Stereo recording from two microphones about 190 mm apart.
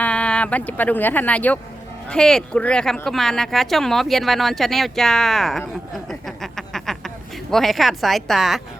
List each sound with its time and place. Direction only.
0.0 s speech: 5° left (ahead or behind)
6.1 s a sound: centre (ahead or behind)
7.5 s speech: centre (ahead or behind)